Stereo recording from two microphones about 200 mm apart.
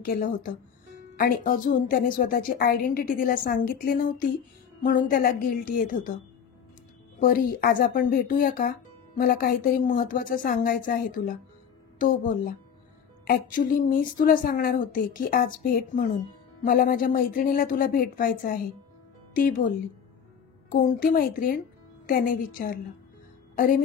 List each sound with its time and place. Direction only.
0.0 s a woman's voice: 45° left (ahead or behind)
7.2 s a woman's voice: 45° left (ahead or behind)
20.7 s a woman's voice: 40° left (ahead or behind)